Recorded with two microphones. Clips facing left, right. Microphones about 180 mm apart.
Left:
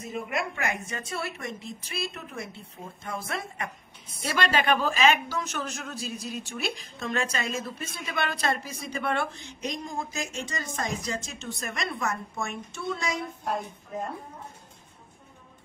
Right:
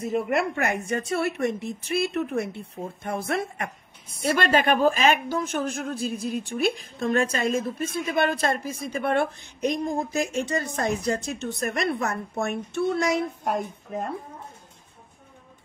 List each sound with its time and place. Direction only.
0.0 s a woman's voice: 65° right (ahead or behind)